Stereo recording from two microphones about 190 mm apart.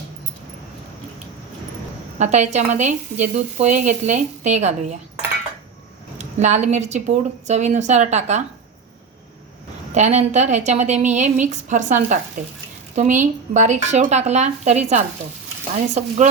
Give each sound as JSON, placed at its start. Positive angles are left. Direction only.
{"t": 2.1, "sound": "speech", "side_deg": -40}
{"t": 6.1, "sound": "speech", "side_deg": -40}
{"t": 9.9, "sound": "speech", "side_deg": -35}